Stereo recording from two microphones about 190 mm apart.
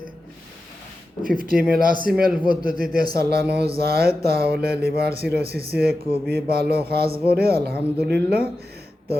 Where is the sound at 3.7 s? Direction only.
55° right (ahead or behind).